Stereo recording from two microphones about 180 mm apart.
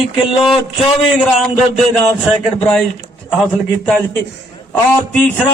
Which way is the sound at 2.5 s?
5° left (ahead or behind).